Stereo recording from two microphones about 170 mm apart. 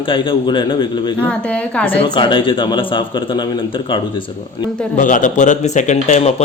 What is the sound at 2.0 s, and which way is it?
Speech, 30° left (ahead or behind).